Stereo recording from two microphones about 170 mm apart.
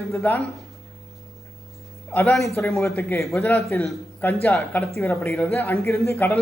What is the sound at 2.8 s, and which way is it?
A man's voice, 15° left (ahead or behind).